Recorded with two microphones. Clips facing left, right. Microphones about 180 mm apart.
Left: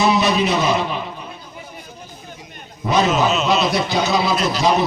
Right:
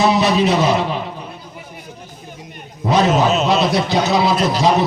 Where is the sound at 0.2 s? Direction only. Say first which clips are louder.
Right 3 dB; 35° right (ahead or behind).